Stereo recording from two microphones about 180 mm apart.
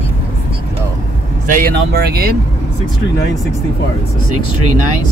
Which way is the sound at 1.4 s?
50° right (ahead or behind).